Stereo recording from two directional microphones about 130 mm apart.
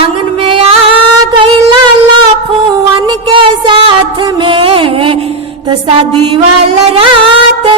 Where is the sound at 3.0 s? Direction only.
35° right (ahead or behind).